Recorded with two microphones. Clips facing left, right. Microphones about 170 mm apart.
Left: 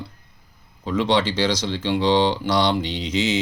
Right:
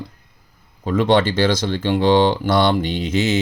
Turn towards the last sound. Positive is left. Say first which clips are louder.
# right 3 dB
turn(degrees=-55)  # may be behind; listen again after turning